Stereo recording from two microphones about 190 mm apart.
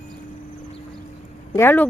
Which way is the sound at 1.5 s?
10° left (ahead or behind).